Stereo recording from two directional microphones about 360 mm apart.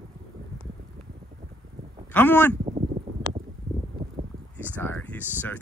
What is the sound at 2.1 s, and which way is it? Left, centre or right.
Speech, centre.